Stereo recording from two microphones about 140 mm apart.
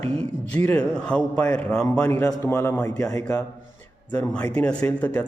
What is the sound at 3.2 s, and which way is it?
Speech, 10° left (ahead or behind).